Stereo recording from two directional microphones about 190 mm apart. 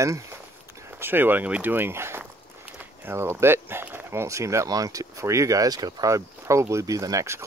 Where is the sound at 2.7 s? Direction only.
10° right (ahead or behind).